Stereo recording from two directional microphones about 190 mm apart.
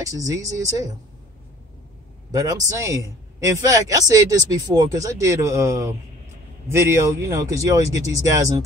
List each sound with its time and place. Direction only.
0.0 s speech: 15° right (ahead or behind)
2.3 s a man's voice: 20° right (ahead or behind)